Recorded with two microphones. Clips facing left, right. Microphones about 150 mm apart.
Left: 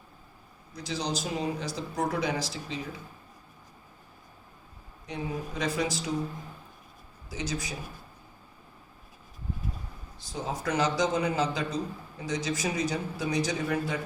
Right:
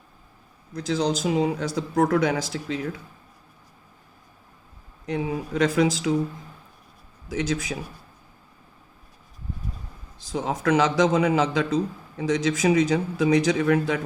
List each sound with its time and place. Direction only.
0.8 s a man's voice: 90° right
5.0 s a man's voice: 90° right
7.3 s a man's voice: 90° right
10.2 s a man's voice: 90° right